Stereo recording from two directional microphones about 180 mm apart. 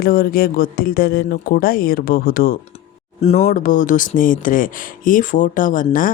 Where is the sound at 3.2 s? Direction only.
35° left (ahead or behind).